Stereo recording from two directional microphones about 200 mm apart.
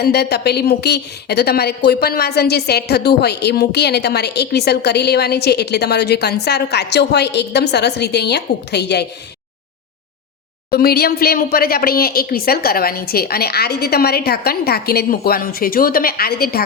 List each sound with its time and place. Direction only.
0.0 s a woman's voice: 55° left (ahead or behind)
10.7 s a woman's voice: 50° left (ahead or behind)